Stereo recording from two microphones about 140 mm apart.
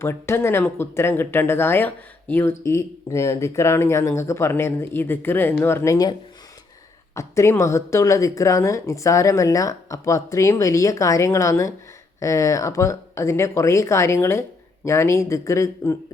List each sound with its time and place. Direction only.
0.0 s speech: 20° left (ahead or behind)
7.2 s speech: 20° left (ahead or behind)